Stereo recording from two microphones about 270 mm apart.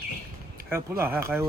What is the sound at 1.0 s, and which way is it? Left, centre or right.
Speech, centre.